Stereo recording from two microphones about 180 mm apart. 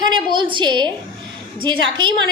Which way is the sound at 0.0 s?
25° right (ahead or behind).